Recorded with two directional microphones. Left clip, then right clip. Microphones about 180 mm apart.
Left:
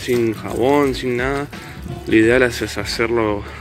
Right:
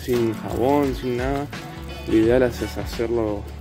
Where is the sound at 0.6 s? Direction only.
15° right (ahead or behind).